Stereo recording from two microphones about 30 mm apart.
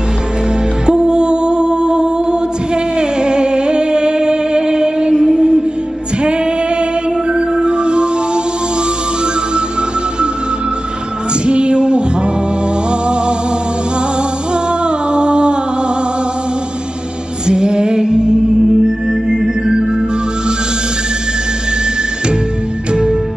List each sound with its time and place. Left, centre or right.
0.8 s music: right
11.4 s music: right
14.5 s music: right
17.5 s music: right